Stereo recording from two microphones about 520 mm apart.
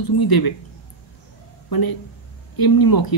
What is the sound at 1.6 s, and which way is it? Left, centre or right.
Speech, left.